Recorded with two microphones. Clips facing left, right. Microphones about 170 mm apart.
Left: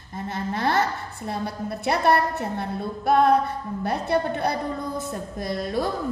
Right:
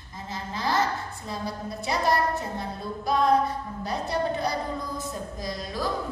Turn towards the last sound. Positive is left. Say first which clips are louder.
# left 5 dB
turn(degrees=60)  # may be behind; listen again after turning